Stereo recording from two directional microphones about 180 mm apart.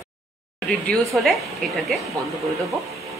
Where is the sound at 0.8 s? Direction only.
Centre (ahead or behind).